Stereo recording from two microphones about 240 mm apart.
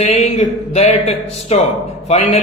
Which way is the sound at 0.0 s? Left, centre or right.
Left.